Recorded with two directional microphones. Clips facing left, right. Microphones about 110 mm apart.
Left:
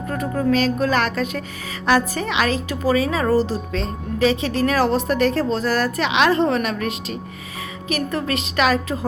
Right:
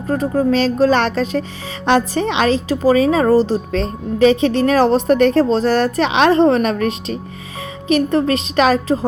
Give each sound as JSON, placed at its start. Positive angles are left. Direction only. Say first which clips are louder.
{"t": 0.1, "sound": "a woman's voice", "louder": "right 5 dB", "side_deg": -35}